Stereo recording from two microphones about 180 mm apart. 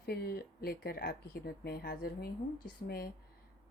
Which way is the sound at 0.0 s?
60° left (ahead or behind).